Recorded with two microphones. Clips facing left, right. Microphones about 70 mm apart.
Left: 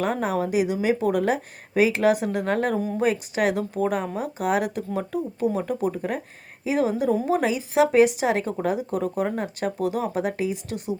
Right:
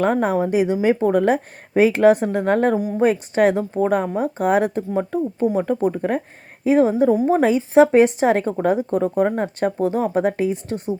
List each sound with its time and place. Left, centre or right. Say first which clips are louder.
0.0 s speech: right 6 dB; right